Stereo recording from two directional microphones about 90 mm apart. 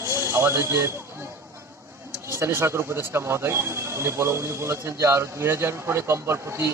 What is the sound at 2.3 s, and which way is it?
Speech, 30° right (ahead or behind).